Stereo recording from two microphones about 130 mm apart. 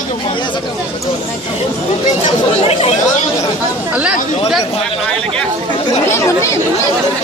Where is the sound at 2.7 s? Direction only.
50° left (ahead or behind).